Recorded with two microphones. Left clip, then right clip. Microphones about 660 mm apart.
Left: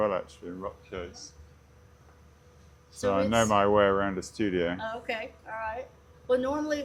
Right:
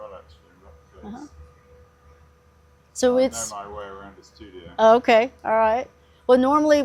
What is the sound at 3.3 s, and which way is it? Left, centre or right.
Speech, left.